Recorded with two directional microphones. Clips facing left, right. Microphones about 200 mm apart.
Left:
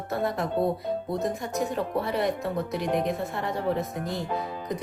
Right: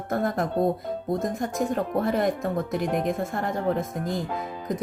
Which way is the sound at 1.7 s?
50° right (ahead or behind).